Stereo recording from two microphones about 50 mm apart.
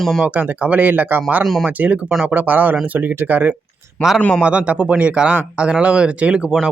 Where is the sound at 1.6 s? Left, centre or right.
Right.